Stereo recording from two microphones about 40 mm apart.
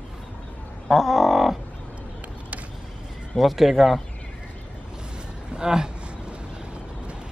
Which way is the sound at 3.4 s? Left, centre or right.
Centre.